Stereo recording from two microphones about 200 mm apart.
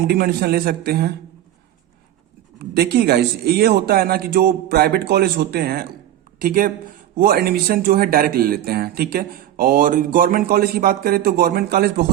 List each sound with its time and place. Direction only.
0.1 s speech: 50° right (ahead or behind)
2.6 s speech: 50° right (ahead or behind)